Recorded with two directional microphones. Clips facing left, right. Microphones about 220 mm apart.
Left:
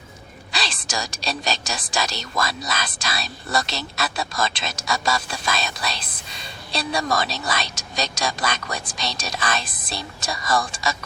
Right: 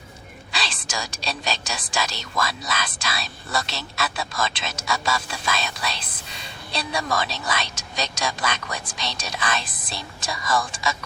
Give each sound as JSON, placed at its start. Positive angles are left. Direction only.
{"t": 0.5, "sound": "speech", "side_deg": 40}